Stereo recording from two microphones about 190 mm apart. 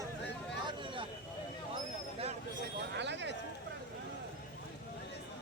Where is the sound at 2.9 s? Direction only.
65° right (ahead or behind).